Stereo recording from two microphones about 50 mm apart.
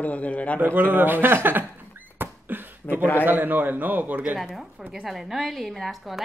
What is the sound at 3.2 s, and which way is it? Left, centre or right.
Speech, right.